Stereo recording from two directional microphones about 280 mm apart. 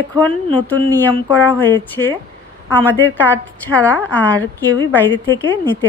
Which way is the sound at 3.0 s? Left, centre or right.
Centre.